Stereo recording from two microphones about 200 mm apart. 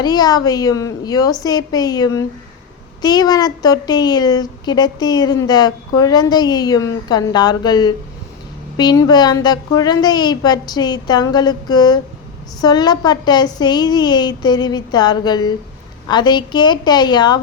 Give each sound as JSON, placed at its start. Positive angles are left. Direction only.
{"t": 0.0, "sound": "speech", "side_deg": 20}